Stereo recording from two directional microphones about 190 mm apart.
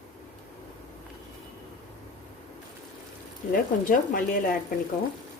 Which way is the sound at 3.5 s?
45° left (ahead or behind).